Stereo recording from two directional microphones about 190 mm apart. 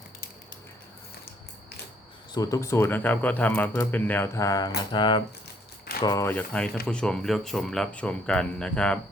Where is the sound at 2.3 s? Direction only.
15° left (ahead or behind).